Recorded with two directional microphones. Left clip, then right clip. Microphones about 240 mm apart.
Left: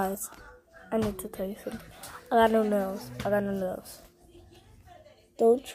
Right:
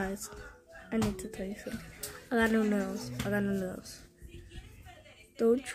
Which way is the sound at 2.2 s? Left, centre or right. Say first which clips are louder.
Left 7 dB; centre.